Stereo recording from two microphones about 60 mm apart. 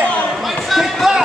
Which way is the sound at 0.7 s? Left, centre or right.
Centre.